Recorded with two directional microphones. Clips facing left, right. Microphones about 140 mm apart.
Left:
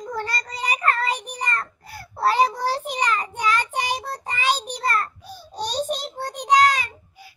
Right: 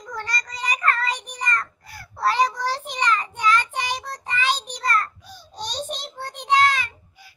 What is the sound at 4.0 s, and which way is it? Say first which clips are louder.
Child singing: left 2 dB; 35° left (ahead or behind).